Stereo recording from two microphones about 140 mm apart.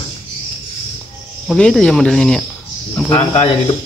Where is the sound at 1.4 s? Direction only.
5° left (ahead or behind).